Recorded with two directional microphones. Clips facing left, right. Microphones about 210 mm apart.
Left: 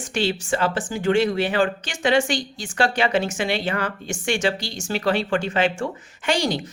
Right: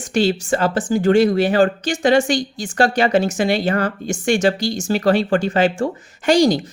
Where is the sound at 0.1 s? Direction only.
40° right (ahead or behind).